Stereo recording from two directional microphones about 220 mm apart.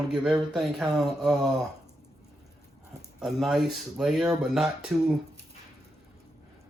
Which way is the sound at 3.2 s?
Centre (ahead or behind).